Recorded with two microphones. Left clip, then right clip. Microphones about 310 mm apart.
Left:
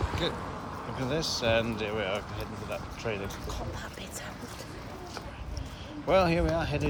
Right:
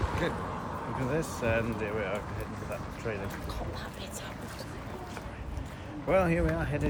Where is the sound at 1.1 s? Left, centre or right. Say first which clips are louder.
Left 4 dB; centre.